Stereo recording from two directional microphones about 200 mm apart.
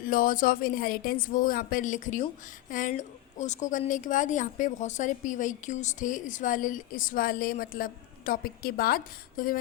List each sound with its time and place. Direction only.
0.0 s a woman's voice: 45° left (ahead or behind)